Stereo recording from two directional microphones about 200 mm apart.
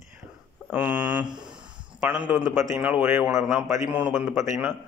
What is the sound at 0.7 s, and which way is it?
Speech, 5° right (ahead or behind).